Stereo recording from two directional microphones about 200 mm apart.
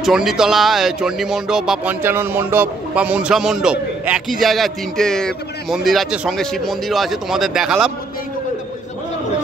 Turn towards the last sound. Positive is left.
turn(degrees=-5)  # may be behind; listen again after turning